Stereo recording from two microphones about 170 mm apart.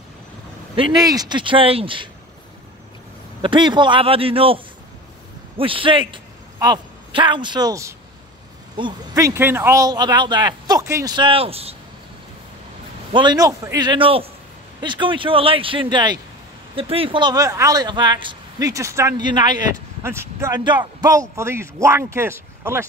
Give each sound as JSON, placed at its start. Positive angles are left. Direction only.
{"t": 0.7, "sound": "speech", "side_deg": -20}
{"t": 3.4, "sound": "a man's voice", "side_deg": -25}
{"t": 5.6, "sound": "a man's voice", "side_deg": -30}
{"t": 13.1, "sound": "speech", "side_deg": -25}
{"t": 20.0, "sound": "speech", "side_deg": -15}